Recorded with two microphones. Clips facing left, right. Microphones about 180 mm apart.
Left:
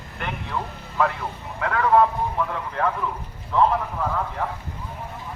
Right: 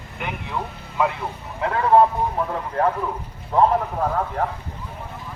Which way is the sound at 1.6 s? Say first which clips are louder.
Right 2 dB; 30° right (ahead or behind).